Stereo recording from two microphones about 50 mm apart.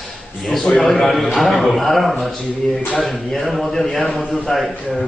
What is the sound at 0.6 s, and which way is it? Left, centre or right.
A man's voice, centre.